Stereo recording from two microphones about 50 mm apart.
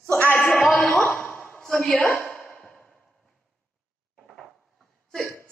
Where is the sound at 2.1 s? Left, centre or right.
Left.